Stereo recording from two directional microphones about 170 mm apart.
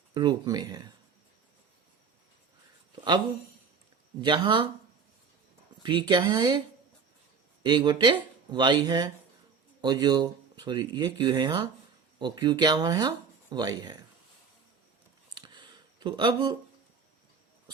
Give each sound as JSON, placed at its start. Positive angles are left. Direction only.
{"t": 0.1, "sound": "speech", "side_deg": -25}
{"t": 2.9, "sound": "speech", "side_deg": -25}
{"t": 4.2, "sound": "speech", "side_deg": -25}
{"t": 5.8, "sound": "speech", "side_deg": -30}
{"t": 7.6, "sound": "speech", "side_deg": -25}
{"t": 15.4, "sound": "a sound", "side_deg": -25}